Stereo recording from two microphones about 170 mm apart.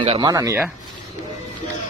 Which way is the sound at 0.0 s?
30° right (ahead or behind).